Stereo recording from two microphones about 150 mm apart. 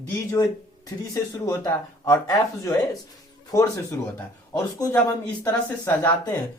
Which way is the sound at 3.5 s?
20° left (ahead or behind).